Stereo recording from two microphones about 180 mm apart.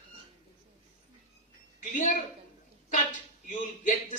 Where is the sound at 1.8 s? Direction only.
45° left (ahead or behind).